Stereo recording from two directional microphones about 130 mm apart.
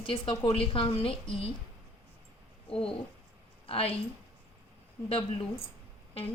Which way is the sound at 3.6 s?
45° left (ahead or behind).